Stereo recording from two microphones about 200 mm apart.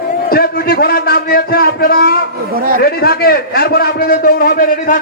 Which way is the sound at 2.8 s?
50° left (ahead or behind).